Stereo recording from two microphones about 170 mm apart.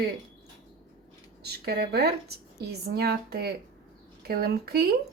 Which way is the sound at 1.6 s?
70° right (ahead or behind).